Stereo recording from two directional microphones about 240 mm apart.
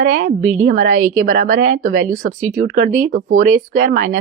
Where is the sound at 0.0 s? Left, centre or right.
Right.